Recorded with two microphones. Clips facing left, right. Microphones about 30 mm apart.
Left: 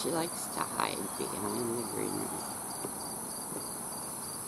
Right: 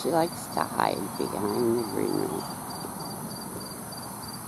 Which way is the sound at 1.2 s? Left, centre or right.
Right.